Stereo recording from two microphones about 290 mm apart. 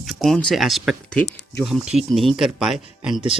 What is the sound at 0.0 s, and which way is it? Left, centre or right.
Speech, centre.